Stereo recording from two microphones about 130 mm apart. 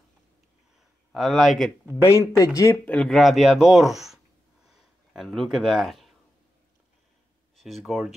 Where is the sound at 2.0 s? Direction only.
25° left (ahead or behind).